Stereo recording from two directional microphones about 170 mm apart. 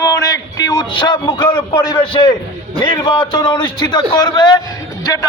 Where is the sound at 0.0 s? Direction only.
20° left (ahead or behind).